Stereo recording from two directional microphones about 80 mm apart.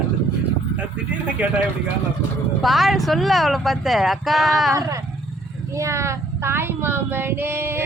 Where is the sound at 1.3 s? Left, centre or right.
Centre.